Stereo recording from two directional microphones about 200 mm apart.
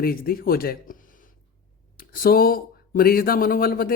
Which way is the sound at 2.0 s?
50° left (ahead or behind).